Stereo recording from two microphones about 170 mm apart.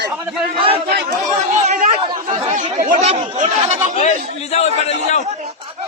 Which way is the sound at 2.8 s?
45° right (ahead or behind).